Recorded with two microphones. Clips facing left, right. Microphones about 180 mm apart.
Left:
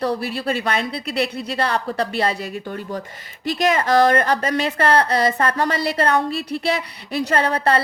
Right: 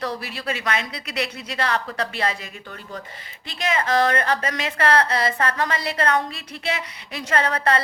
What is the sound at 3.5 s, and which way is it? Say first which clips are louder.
Speech: left 5 dB; 40° left (ahead or behind).